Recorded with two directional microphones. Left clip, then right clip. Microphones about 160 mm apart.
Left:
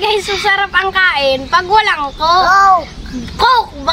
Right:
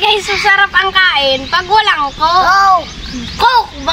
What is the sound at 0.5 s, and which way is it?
A woman's voice, 30° left (ahead or behind).